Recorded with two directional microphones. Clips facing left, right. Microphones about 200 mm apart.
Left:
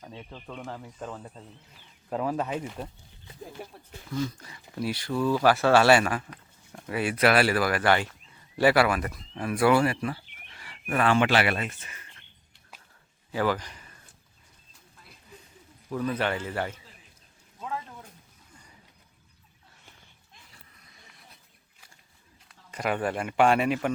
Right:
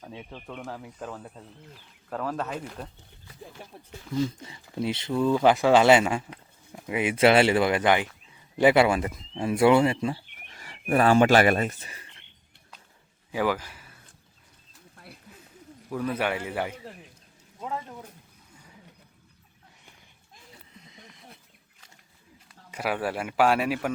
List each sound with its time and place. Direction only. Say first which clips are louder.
0.0 s speech: right 2 dB; 10° right (ahead or behind)
2.0 s speech: left 2 dB; 10° left (ahead or behind)
3.6 s a sound: left 4 dB; 5° left (ahead or behind)
4.1 s speech: right 3 dB; 20° right (ahead or behind)
10.5 s speech: right 5 dB; 40° right (ahead or behind)
13.3 s speech: right 1 dB; 10° right (ahead or behind)
15.9 s a man's voice: even; 10° right (ahead or behind)
20.7 s a sound: right 8 dB; 20° right (ahead or behind)
22.4 s a man's voice: even; 5° right (ahead or behind)